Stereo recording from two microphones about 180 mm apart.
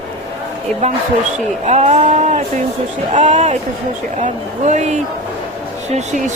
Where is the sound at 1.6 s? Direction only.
35° right (ahead or behind).